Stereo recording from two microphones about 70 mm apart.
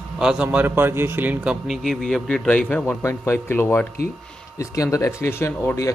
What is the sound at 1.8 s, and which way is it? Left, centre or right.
Speech, centre.